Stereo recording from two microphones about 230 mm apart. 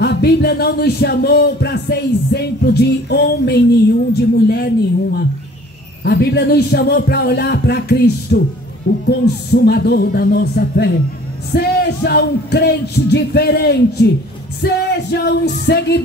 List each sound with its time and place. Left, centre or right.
0.0 s speech: left